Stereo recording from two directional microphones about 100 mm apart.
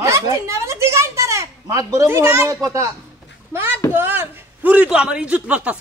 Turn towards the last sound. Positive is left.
turn(degrees=-15)  # may be behind; listen again after turning